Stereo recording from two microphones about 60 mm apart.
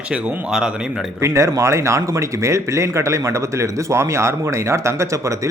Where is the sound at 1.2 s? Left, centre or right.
Right.